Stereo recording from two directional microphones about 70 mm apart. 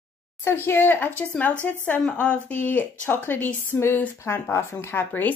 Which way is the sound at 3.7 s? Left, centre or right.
Left.